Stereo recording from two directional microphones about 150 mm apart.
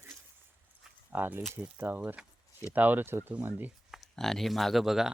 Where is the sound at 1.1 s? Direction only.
15° right (ahead or behind).